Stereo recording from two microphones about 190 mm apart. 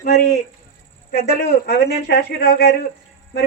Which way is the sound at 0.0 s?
55° left (ahead or behind).